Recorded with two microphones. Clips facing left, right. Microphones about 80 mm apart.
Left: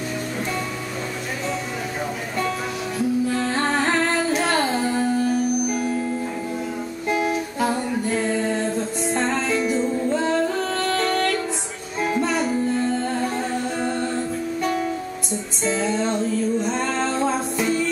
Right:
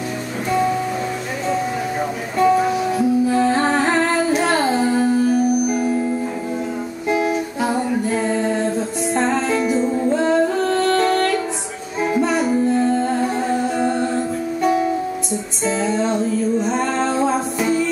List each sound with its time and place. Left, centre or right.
2.3 s music: centre
7.1 s music: centre